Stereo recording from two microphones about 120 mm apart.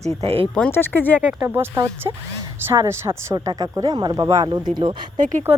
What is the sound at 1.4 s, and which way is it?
Speech, 20° right (ahead or behind).